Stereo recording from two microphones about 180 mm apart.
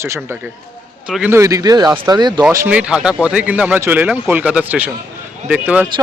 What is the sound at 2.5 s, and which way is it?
A man's voice, 10° right (ahead or behind).